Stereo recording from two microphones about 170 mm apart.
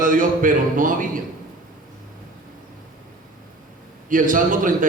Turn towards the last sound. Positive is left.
turn(degrees=-50)  # may be behind; listen again after turning